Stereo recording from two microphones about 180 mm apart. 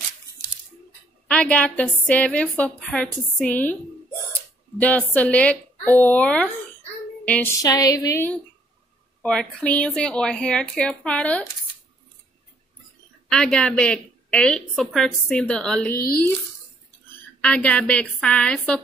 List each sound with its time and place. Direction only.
1.3 s a woman's voice: 5° left (ahead or behind)
4.3 s a sound: 10° left (ahead or behind)
7.6 s a sound: 20° left (ahead or behind)
9.2 s a woman's voice: 5° left (ahead or behind)
13.3 s a woman's voice: 5° left (ahead or behind)
17.4 s a woman's voice: 5° left (ahead or behind)